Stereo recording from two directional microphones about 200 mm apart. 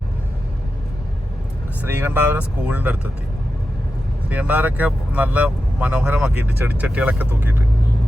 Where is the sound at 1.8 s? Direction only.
10° right (ahead or behind).